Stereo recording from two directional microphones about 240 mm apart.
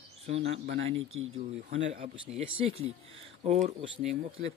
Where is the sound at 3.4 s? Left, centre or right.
Right.